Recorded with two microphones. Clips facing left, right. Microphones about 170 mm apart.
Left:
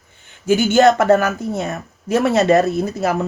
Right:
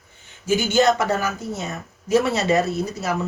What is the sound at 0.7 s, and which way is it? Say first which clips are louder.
A woman's voice: left 7 dB; 65° left (ahead or behind).